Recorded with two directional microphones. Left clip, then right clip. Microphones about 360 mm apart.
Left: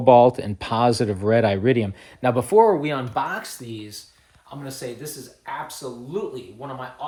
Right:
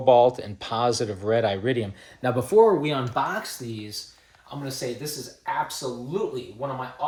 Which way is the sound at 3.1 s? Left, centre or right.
Centre.